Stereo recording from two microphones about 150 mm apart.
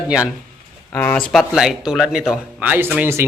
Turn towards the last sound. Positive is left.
turn(degrees=-15)  # may be behind; listen again after turning